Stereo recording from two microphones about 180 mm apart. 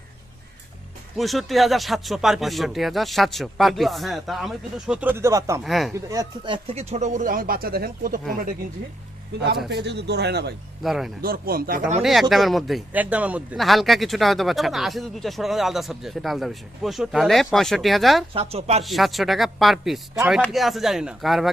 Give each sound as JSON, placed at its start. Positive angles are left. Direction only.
{"t": 1.1, "sound": "a man's voice", "side_deg": 0}
{"t": 5.6, "sound": "a man's voice", "side_deg": 0}
{"t": 5.9, "sound": "speech", "side_deg": -20}
{"t": 9.6, "sound": "speech", "side_deg": -70}
{"t": 10.8, "sound": "a man's voice", "side_deg": 0}
{"t": 11.2, "sound": "speech", "side_deg": -55}
{"t": 12.3, "sound": "a man's voice", "side_deg": 0}
{"t": 18.3, "sound": "speech", "side_deg": -35}
{"t": 18.8, "sound": "a man's voice", "side_deg": 0}